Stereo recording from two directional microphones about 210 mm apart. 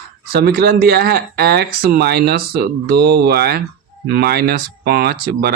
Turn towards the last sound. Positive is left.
turn(degrees=-45)  # may be behind; listen again after turning